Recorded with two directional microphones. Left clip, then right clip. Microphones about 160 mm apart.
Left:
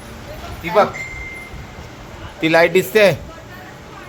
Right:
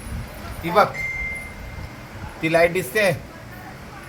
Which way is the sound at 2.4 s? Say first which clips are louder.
Left 5 dB; 70° left (ahead or behind).